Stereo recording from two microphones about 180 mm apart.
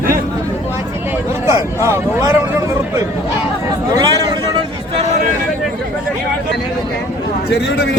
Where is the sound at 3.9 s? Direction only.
25° right (ahead or behind).